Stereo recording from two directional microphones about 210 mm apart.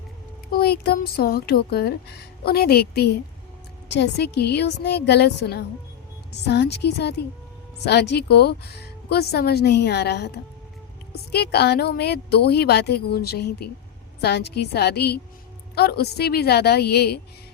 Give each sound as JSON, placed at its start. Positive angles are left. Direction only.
{"t": 0.5, "sound": "speech", "side_deg": 50}